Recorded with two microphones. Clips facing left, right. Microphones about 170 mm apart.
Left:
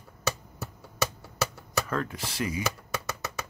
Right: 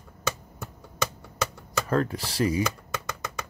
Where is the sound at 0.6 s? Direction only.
5° left (ahead or behind).